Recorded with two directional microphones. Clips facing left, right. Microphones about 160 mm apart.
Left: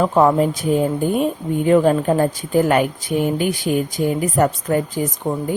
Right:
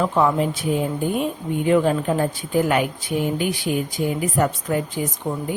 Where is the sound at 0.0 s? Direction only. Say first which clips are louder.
Left 4 dB; 40° left (ahead or behind).